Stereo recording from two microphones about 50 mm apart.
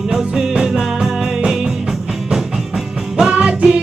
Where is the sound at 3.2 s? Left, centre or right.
Centre.